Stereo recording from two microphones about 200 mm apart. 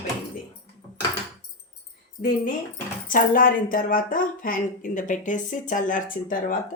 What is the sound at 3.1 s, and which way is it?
Speech, 45° left (ahead or behind).